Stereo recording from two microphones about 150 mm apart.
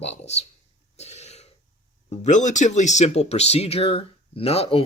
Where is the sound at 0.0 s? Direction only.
45° left (ahead or behind).